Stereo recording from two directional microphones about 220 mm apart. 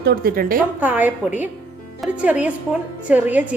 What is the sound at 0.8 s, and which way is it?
A woman's voice, 5° right (ahead or behind).